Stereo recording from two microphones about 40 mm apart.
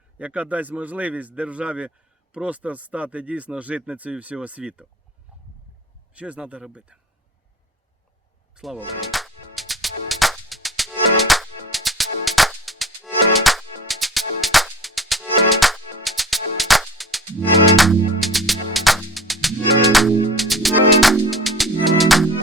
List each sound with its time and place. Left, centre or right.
0.2 s speech: right
6.1 s speech: right
8.6 s music: centre